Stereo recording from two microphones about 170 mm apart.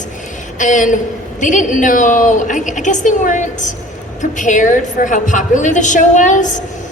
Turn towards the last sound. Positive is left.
turn(degrees=45)  # may be behind; listen again after turning